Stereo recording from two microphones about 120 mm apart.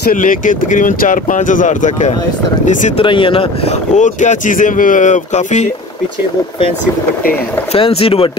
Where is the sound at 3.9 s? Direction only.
85° left.